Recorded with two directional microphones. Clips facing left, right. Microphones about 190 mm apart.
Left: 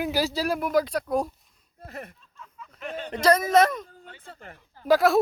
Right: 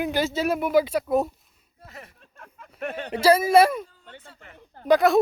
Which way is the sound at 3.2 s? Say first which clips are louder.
Right 3 dB; 10° right (ahead or behind).